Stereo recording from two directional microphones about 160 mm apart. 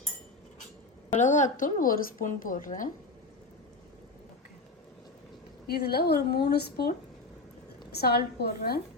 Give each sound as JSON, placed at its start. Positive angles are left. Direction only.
{"t": 1.1, "sound": "a woman's voice", "side_deg": 50}
{"t": 5.6, "sound": "a woman's voice", "side_deg": 80}
{"t": 7.9, "sound": "a woman's voice", "side_deg": 90}